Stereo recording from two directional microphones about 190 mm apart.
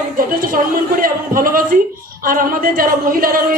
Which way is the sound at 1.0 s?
50° right (ahead or behind).